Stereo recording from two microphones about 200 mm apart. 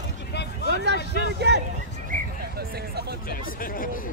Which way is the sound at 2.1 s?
50° right (ahead or behind).